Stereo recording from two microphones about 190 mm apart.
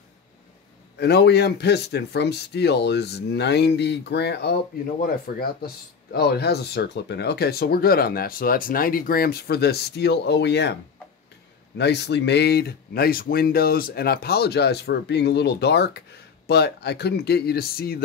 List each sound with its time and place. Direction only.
0.9 s speech: 60° left (ahead or behind)